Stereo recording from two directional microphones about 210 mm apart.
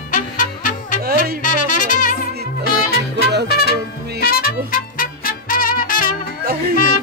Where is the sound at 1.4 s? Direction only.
40° left (ahead or behind).